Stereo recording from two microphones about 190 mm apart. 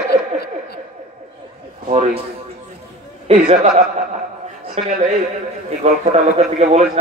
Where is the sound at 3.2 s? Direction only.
35° right (ahead or behind).